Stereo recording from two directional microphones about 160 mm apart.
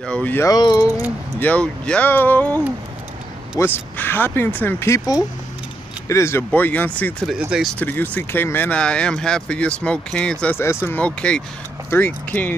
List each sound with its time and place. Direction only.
0.0 s speech: 5° left (ahead or behind)
0.5 s speech: 25° left (ahead or behind)
1.4 s speech: 5° left (ahead or behind)